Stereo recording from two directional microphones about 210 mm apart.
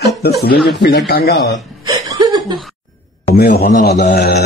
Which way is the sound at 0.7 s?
50° left (ahead or behind).